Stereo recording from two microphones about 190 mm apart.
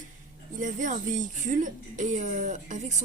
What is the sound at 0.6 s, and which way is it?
A woman's voice, 40° right (ahead or behind).